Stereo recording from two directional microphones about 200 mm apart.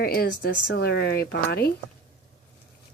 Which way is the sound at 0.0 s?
50° left (ahead or behind).